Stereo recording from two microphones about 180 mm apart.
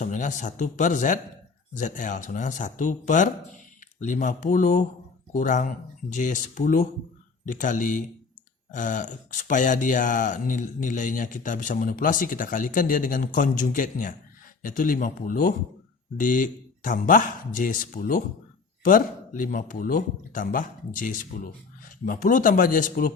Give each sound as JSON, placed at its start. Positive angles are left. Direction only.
{"t": 0.0, "sound": "speech", "side_deg": 45}